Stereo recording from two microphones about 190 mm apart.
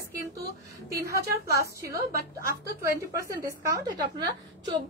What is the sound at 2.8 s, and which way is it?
A woman's voice, 15° right (ahead or behind).